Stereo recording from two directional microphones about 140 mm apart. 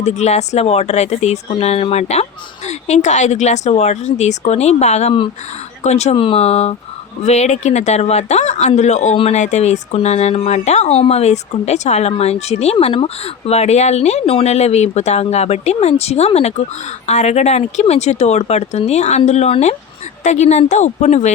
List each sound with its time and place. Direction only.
0.0 s speech: 50° left (ahead or behind)
6.1 s a woman's voice: 40° left (ahead or behind)